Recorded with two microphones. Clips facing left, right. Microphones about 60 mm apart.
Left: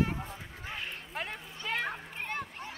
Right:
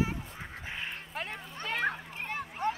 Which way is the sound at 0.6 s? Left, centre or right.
Centre.